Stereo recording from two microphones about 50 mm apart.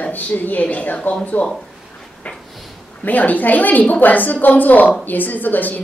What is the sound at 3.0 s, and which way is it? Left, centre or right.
A woman's voice, left.